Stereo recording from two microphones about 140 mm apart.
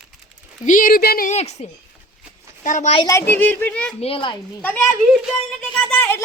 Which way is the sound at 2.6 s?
60° left (ahead or behind).